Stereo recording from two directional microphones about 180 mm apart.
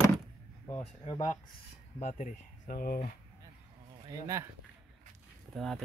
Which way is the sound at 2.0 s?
45° left (ahead or behind).